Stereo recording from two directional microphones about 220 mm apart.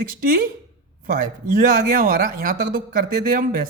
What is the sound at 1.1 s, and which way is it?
Speech, 35° right (ahead or behind).